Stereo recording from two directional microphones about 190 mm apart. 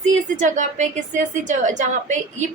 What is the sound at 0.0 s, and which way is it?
A woman's voice, 40° right (ahead or behind).